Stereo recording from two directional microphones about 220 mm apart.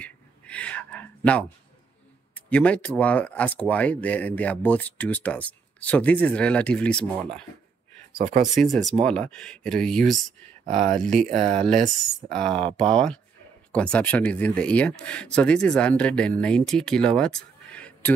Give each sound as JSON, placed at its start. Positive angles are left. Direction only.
{"t": 0.0, "sound": "a sound", "side_deg": 5}
{"t": 2.3, "sound": "speech", "side_deg": 5}
{"t": 8.2, "sound": "speech", "side_deg": -30}
{"t": 8.5, "sound": "speech", "side_deg": 0}
{"t": 10.6, "sound": "speech", "side_deg": -35}
{"t": 11.0, "sound": "speech", "side_deg": 5}
{"t": 11.2, "sound": "speech", "side_deg": -30}
{"t": 11.6, "sound": "speech", "side_deg": 5}